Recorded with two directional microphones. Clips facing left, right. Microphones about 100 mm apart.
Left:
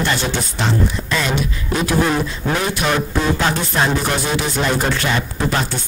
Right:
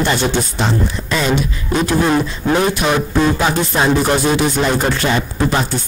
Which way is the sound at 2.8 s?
10° right (ahead or behind).